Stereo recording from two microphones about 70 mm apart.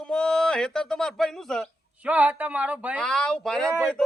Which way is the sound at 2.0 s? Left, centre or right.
Right.